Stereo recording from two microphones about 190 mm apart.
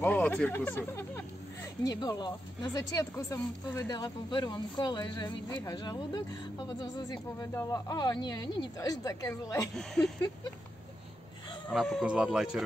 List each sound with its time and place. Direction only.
0.0 s speech: 10° left (ahead or behind)
10.0 s speech: 5° left (ahead or behind)
11.7 s speech: centre (ahead or behind)